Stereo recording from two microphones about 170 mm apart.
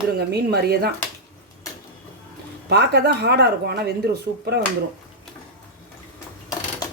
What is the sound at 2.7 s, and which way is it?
Speech, 70° right (ahead or behind).